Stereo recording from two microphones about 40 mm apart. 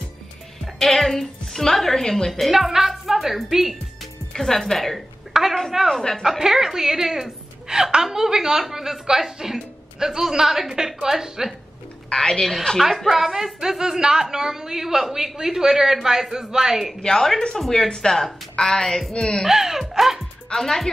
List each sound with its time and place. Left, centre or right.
0.7 s a woman's voice: centre
2.4 s a woman's voice: centre
4.3 s a woman's voice: centre
5.3 s a sound: centre
5.9 s speech: centre
6.2 s a woman's voice: centre
12.1 s a woman's voice: centre
12.7 s a woman's voice: centre
17.0 s a woman's voice: centre
19.4 s a woman's voice: centre
20.5 s a woman's voice: centre